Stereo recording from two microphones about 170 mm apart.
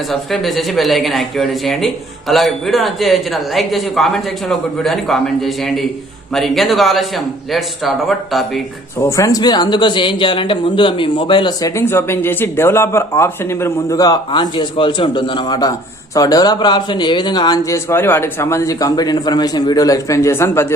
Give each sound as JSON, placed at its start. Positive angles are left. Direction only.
{"t": 0.1, "sound": "a man's voice", "side_deg": 0}
{"t": 9.0, "sound": "speech", "side_deg": 15}